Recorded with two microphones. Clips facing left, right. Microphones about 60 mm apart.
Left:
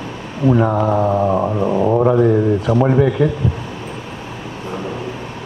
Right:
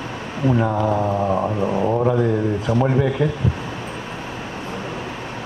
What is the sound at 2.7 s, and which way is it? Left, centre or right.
Speech, left.